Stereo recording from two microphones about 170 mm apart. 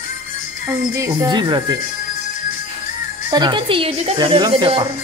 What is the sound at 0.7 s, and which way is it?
Music, 15° right (ahead or behind).